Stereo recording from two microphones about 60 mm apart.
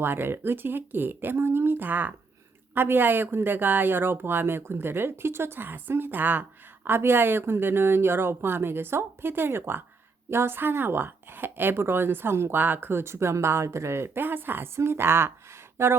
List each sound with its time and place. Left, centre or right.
0.0 s speech: right